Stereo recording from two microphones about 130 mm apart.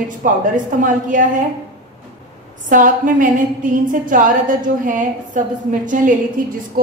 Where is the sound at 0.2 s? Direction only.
90° right.